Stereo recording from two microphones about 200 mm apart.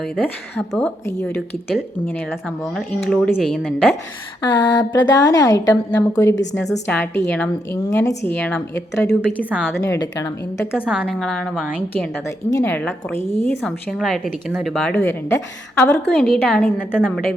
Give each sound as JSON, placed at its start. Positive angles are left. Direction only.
{"t": 0.7, "sound": "a woman's voice", "side_deg": 5}
{"t": 4.4, "sound": "a woman's voice", "side_deg": 20}
{"t": 9.4, "sound": "a woman's voice", "side_deg": -5}
{"t": 9.8, "sound": "a woman's voice", "side_deg": 15}
{"t": 10.8, "sound": "a woman's voice", "side_deg": 0}